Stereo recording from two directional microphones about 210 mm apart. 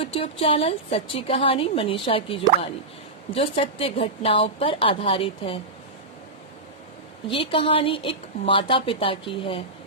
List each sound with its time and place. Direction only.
0.0 s a woman's voice: 25° left (ahead or behind)
7.3 s a woman's voice: 25° left (ahead or behind)